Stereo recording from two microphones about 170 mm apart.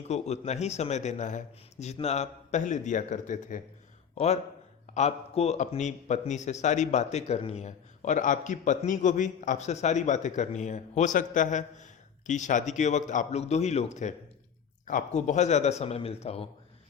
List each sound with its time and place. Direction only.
0.1 s a man's voice: 40° left (ahead or behind)